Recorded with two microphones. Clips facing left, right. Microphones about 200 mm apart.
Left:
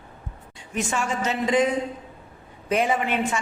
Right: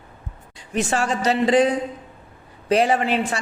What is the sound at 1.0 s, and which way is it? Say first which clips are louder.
Speech: right 5 dB; 35° right (ahead or behind).